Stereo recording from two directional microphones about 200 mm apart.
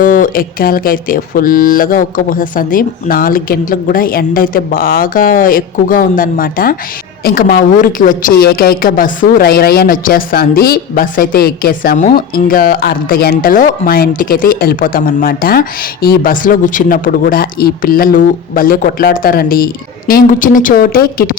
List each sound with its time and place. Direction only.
0.0 s a woman's voice: 40° left (ahead or behind)